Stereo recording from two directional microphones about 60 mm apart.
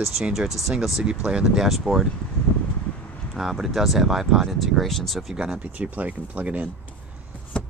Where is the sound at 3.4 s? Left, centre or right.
Centre.